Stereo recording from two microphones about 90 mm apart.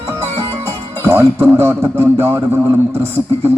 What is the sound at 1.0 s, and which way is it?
A man's voice, 30° right (ahead or behind).